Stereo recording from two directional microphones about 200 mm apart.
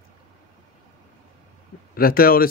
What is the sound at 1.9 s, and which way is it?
Speech, 45° left (ahead or behind).